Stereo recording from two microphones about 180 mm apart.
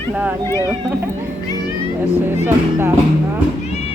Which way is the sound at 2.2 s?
10° right (ahead or behind).